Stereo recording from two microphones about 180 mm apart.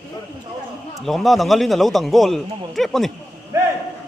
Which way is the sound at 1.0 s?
Centre (ahead or behind).